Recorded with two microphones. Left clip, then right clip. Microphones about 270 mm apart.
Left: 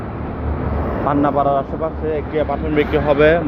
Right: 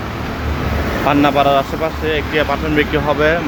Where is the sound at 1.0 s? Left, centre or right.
Right.